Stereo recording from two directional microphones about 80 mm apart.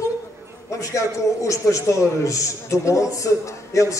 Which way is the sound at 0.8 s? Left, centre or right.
Left.